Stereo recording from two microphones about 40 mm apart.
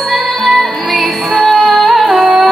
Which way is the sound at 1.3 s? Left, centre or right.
Centre.